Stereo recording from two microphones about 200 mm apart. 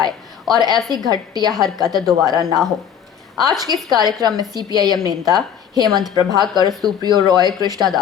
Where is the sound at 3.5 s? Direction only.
20° right (ahead or behind).